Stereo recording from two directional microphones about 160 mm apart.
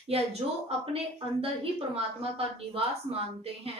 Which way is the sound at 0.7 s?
40° right (ahead or behind).